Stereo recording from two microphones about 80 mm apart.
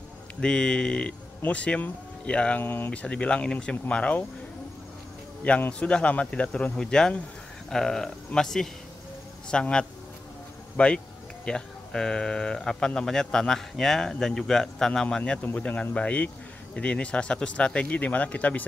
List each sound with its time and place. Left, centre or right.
0.4 s speech: centre
2.6 s speech: left
2.9 s speech: centre
5.4 s speech: centre